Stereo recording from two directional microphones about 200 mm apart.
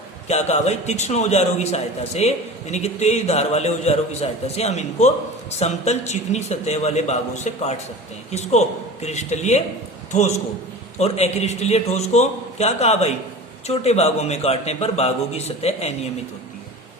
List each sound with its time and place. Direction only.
0.3 s a man's voice: 35° left (ahead or behind)